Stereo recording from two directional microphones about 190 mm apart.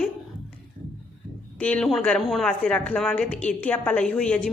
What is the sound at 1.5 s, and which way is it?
Speech, 5° left (ahead or behind).